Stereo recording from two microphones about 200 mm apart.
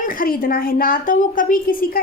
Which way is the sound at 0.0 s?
45° left (ahead or behind).